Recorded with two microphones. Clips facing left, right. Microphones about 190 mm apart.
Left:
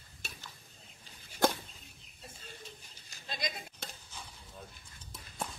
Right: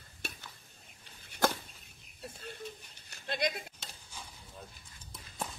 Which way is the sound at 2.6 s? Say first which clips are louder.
Right 7 dB; 60° right (ahead or behind).